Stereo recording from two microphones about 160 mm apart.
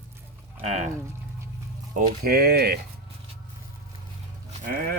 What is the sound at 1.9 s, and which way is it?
Speech, 65° right (ahead or behind).